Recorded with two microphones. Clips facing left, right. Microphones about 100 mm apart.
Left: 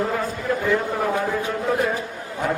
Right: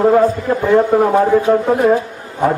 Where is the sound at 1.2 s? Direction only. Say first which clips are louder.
Right 12 dB; 50° right (ahead or behind).